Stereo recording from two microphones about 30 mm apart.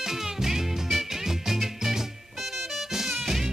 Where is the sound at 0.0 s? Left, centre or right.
Centre.